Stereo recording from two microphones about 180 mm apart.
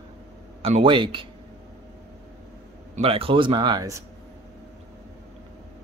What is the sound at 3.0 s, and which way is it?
Speech, 30° right (ahead or behind).